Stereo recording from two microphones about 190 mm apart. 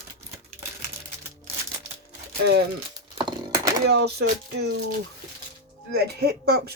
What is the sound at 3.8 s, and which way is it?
Speech, 60° right (ahead or behind).